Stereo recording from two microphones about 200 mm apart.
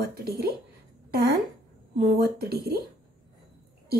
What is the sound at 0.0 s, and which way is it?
Speech, 55° right (ahead or behind).